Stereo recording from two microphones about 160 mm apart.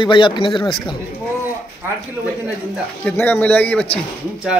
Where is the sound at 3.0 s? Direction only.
10° left (ahead or behind).